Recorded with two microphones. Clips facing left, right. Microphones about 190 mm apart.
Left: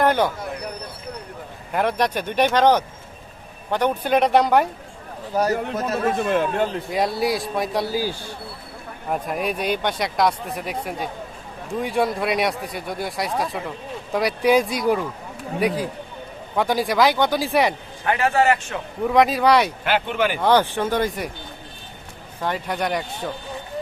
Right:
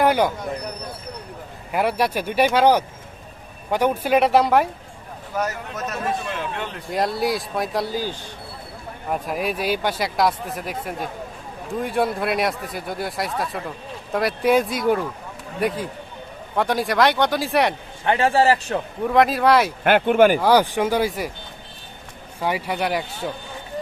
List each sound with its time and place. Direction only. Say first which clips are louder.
0.0 s a sound: right 1 dB; 10° right (ahead or behind)
1.7 s speech: even; 10° right (ahead or behind)
5.3 s speech: left 5 dB; 35° left (ahead or behind)
6.1 s speech: left 8 dB; 50° left (ahead or behind)
6.9 s speech: right 3 dB; centre (ahead or behind)
18.0 s a man's voice: right 1 dB; 30° right (ahead or behind)
19.0 s speech: even; centre (ahead or behind)
19.8 s speech: right 7 dB; 55° right (ahead or behind)
20.4 s speech: right 1 dB; 10° right (ahead or behind)
22.4 s speech: right 1 dB; 10° right (ahead or behind)